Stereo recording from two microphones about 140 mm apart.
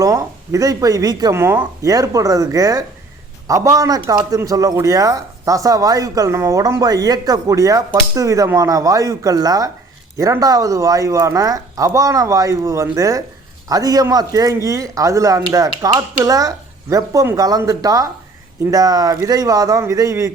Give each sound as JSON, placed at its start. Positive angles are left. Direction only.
{"t": 0.0, "sound": "a man's voice", "side_deg": -25}